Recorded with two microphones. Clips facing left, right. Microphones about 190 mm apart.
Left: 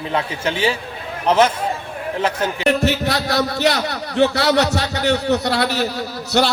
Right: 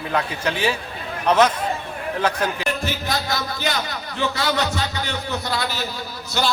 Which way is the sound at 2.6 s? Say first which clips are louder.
Left 8 dB; 70° left (ahead or behind).